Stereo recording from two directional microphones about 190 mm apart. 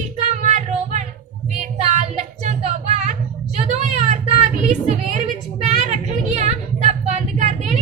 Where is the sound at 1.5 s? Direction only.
40° right (ahead or behind).